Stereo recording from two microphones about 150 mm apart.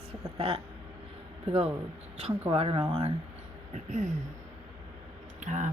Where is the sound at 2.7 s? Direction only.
25° right (ahead or behind).